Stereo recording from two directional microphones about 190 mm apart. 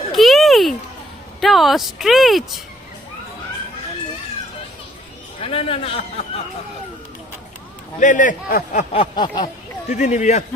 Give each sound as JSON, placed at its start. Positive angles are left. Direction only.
{"t": 0.1, "sound": "a sound", "side_deg": 0}
{"t": 1.4, "sound": "speech", "side_deg": 0}
{"t": 5.4, "sound": "speech", "side_deg": 30}
{"t": 7.9, "sound": "a man's voice", "side_deg": 40}
{"t": 8.8, "sound": "a sound", "side_deg": 30}
{"t": 9.9, "sound": "speech", "side_deg": 40}